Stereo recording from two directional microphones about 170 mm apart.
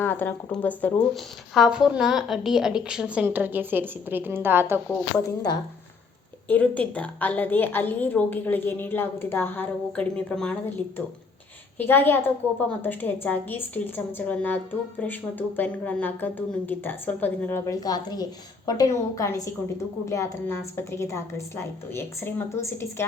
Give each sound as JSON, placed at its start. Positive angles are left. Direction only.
{"t": 0.0, "sound": "a woman's voice", "side_deg": 10}
{"t": 1.5, "sound": "a woman's voice", "side_deg": -5}
{"t": 5.1, "sound": "speech", "side_deg": 25}
{"t": 6.5, "sound": "a woman's voice", "side_deg": 10}